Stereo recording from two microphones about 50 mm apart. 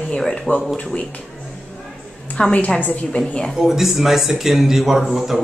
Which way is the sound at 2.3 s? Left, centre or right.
Left.